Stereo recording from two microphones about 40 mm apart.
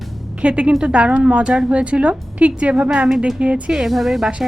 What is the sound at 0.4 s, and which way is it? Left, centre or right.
A woman's voice, right.